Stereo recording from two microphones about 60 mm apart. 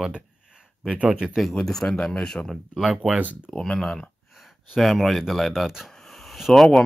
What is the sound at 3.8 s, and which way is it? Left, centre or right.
Speech, centre.